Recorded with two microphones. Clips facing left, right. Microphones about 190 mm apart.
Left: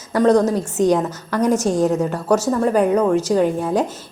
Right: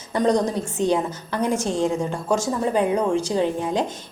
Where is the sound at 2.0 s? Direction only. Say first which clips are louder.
Left 5 dB; 70° left (ahead or behind).